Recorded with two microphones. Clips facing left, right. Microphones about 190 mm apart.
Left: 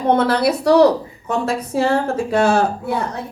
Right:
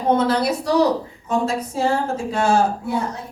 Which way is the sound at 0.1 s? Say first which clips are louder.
Left 2 dB; 65° left (ahead or behind).